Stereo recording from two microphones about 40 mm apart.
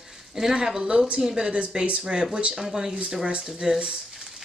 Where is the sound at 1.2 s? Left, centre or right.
Centre.